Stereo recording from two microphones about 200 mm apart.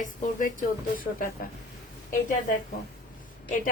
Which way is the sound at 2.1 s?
45° left (ahead or behind).